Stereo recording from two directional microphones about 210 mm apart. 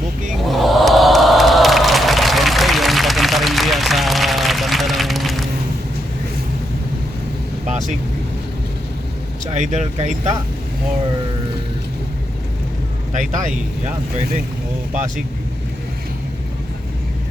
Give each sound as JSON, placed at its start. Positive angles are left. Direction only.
{"t": 0.4, "sound": "crowd", "side_deg": 0}
{"t": 7.7, "sound": "vehicle", "side_deg": -35}
{"t": 9.5, "sound": "speech", "side_deg": -35}
{"t": 13.1, "sound": "speech", "side_deg": -35}